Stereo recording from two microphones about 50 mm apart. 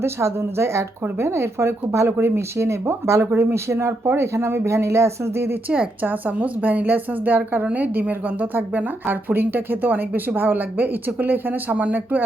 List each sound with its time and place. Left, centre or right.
0.0 s speech: right
6.0 s speech: right